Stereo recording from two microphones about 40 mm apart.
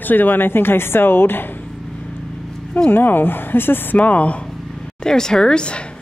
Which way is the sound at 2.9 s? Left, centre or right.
Left.